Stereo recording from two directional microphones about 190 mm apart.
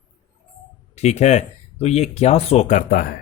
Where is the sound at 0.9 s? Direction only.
35° left (ahead or behind).